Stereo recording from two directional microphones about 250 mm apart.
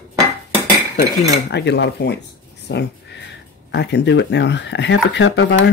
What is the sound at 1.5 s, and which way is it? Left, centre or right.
Speech, left.